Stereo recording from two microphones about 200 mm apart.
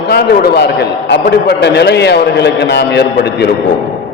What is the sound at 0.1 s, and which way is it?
A man's voice, 55° left (ahead or behind).